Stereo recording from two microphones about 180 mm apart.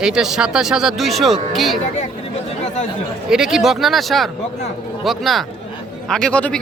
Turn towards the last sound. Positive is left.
turn(degrees=5)  # may be behind; listen again after turning